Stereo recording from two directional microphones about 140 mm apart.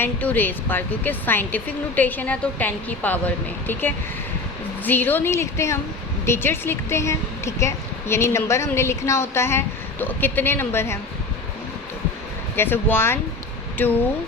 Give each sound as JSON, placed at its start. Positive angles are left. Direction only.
{"t": 0.0, "sound": "speech", "side_deg": 10}
{"t": 12.5, "sound": "speech", "side_deg": 15}